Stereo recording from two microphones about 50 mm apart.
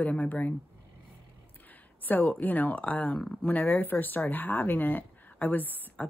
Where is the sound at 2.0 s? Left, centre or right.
Left.